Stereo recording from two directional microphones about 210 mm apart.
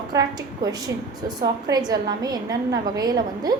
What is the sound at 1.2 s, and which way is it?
A woman's voice, 20° right (ahead or behind).